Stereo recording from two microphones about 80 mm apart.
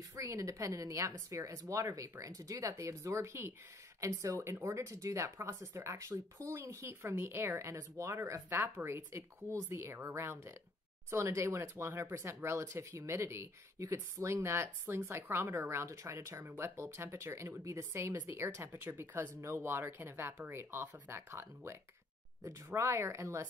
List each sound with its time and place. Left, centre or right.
0.1 s speech: right